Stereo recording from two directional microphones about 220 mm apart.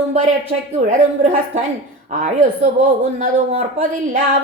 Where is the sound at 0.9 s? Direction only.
35° right (ahead or behind).